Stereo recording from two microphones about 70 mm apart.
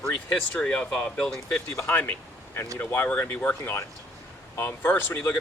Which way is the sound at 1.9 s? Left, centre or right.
Left.